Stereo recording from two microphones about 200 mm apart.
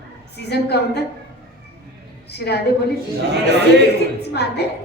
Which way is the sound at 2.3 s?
55° left (ahead or behind).